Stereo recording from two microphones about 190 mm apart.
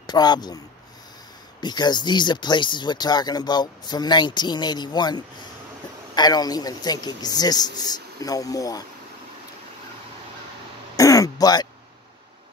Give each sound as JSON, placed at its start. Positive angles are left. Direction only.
{"t": 0.0, "sound": "speech", "side_deg": 20}
{"t": 1.6, "sound": "speech", "side_deg": 20}
{"t": 11.0, "sound": "throat clearing", "side_deg": 20}